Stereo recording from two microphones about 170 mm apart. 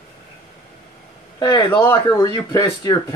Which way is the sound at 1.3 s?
25° left (ahead or behind).